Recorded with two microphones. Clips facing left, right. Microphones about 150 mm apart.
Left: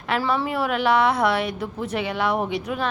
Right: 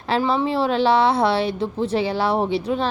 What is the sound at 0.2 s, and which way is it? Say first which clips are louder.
Speech: right 4 dB; 25° right (ahead or behind).